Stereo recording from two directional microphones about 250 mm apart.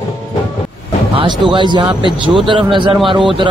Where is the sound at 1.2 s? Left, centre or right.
Centre.